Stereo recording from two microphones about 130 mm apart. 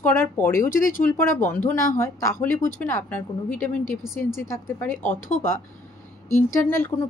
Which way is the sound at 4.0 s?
5° right (ahead or behind).